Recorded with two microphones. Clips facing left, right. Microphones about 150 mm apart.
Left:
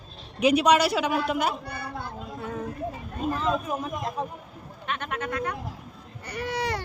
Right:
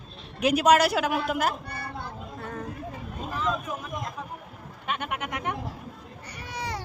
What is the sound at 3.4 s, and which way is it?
Speech, 35° left (ahead or behind).